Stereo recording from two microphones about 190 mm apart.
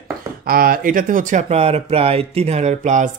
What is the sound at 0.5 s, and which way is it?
Speech, 50° right (ahead or behind).